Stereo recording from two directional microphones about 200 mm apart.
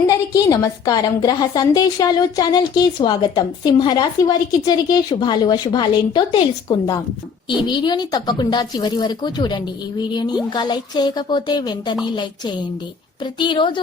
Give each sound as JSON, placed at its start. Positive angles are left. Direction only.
{"t": 0.3, "sound": "a woman's voice", "side_deg": 15}
{"t": 13.2, "sound": "a woman's voice", "side_deg": 25}